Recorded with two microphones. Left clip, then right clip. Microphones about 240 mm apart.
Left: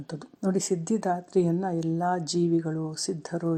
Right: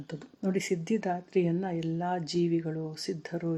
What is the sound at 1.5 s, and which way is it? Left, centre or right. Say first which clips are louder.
Speech: left 4 dB; centre.